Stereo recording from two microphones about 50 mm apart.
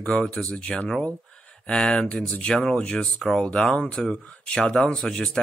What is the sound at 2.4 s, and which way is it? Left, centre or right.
Speech, centre.